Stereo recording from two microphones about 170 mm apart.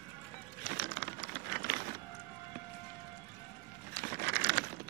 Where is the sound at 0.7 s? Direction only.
70° right (ahead or behind).